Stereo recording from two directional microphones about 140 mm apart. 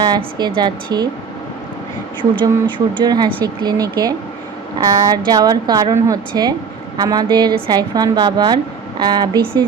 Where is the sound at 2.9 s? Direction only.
30° right (ahead or behind).